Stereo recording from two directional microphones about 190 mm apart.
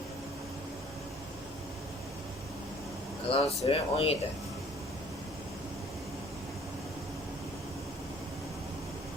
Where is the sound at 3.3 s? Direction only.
30° left (ahead or behind).